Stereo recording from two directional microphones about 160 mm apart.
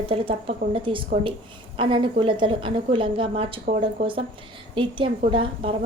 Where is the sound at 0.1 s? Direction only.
35° right (ahead or behind).